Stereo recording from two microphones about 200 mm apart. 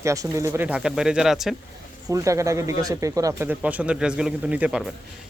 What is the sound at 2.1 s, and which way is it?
Speech, 15° right (ahead or behind).